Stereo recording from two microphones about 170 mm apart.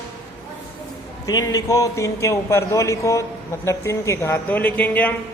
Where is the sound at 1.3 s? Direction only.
20° left (ahead or behind).